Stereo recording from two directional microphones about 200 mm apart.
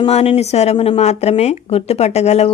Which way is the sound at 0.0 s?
30° left (ahead or behind).